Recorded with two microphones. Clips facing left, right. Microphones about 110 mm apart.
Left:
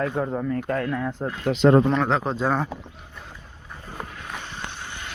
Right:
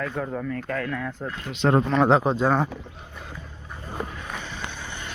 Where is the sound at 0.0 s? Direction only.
20° left (ahead or behind).